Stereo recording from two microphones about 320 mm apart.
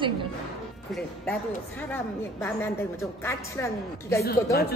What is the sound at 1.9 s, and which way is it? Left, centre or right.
A woman's voice, centre.